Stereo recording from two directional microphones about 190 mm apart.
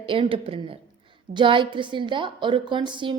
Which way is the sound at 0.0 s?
30° right (ahead or behind).